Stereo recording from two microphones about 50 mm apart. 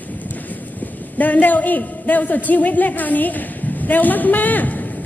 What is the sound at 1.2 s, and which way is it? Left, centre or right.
A woman's voice, left.